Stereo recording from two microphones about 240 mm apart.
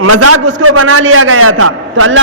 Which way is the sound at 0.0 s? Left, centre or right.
Right.